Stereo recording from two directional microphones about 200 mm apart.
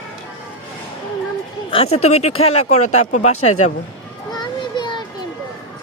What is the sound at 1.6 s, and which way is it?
Speech, 30° left (ahead or behind).